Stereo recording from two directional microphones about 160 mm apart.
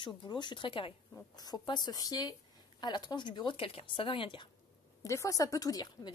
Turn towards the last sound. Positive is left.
turn(degrees=25)  # may be behind; listen again after turning